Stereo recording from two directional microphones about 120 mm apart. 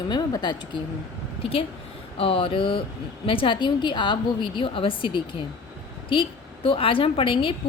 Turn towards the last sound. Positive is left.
turn(degrees=45)  # may be behind; listen again after turning